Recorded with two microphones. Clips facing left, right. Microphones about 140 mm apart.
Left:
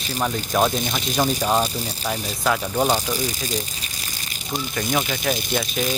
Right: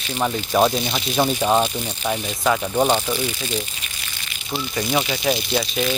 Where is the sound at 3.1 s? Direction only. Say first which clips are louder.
Right 1 dB; 40° left (ahead or behind).